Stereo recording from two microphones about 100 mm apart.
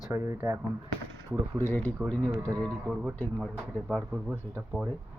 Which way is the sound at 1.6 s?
15° left (ahead or behind).